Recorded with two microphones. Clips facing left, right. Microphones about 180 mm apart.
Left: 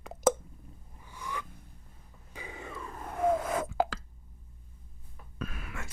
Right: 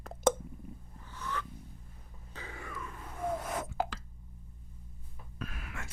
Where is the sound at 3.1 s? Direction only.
90° left.